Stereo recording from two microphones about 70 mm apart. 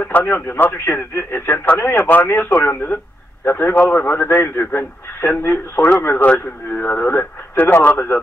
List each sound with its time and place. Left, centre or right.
0.0 s speech: left
6.2 s a man's voice: left